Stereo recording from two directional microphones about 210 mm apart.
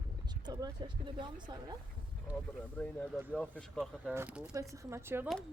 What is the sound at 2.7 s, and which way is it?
Speech, 5° left (ahead or behind).